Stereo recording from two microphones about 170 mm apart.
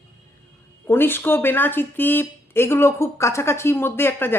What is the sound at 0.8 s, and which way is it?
Speech, 15° left (ahead or behind).